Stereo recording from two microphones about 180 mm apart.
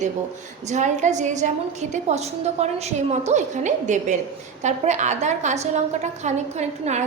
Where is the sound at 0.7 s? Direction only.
40° right (ahead or behind).